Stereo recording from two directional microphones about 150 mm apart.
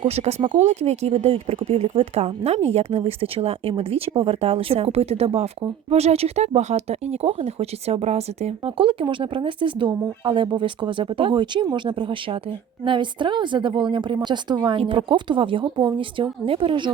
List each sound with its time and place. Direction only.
0.0 s speech: 45° right (ahead or behind)